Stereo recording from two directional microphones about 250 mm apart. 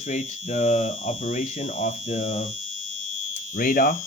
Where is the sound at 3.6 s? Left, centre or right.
Left.